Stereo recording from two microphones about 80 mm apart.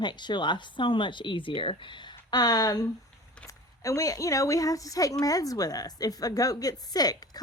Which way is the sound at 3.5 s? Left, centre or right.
Left.